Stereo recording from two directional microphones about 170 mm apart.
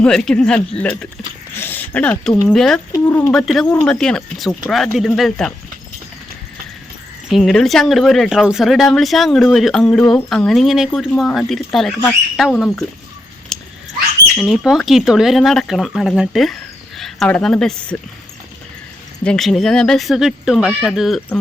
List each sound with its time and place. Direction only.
0.0 s speech: 5° left (ahead or behind)
2.9 s speech: 15° left (ahead or behind)
3.3 s speech: centre (ahead or behind)
7.3 s speech: centre (ahead or behind)
13.5 s cat: centre (ahead or behind)
14.3 s speech: 5° left (ahead or behind)
19.2 s speech: 5° left (ahead or behind)